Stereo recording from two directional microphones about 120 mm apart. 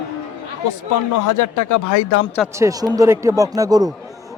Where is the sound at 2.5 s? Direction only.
30° right (ahead or behind).